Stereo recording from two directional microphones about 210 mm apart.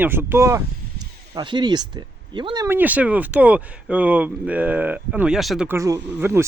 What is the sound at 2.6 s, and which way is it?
Speech, 10° right (ahead or behind).